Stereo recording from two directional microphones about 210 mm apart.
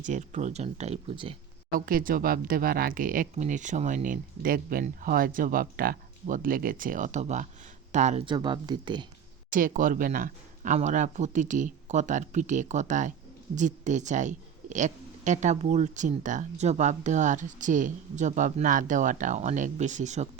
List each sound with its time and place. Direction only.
0.0 s a woman's voice: 35° right (ahead or behind)
1.8 s a woman's voice: 45° right (ahead or behind); by 9.0 s 20° right (ahead or behind)
9.5 s a woman's voice: 40° right (ahead or behind)